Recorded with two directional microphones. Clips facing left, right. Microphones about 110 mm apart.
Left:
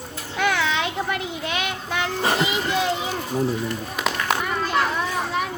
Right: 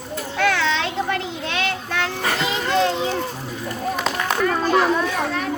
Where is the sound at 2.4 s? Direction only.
10° left (ahead or behind).